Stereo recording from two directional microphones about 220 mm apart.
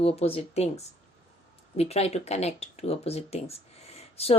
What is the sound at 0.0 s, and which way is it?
Speech, 25° left (ahead or behind).